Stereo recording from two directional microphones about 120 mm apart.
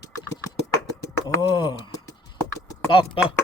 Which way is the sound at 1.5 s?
40° left (ahead or behind).